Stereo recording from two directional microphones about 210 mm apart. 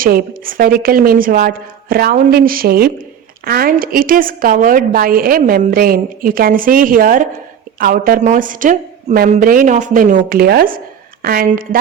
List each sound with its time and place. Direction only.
0.0 s a woman's voice: 40° right (ahead or behind)